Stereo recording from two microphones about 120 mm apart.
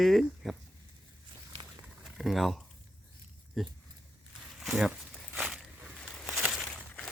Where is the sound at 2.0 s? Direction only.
Centre (ahead or behind).